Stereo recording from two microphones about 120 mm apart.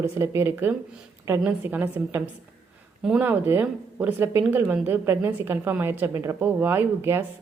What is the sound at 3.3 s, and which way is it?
A woman's voice, 15° right (ahead or behind).